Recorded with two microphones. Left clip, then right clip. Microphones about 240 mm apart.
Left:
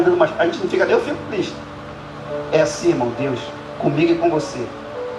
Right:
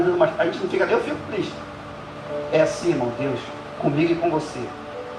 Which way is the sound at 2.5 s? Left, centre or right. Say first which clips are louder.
Left 2 dB; left.